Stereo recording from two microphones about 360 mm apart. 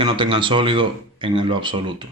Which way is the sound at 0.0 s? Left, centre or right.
Centre.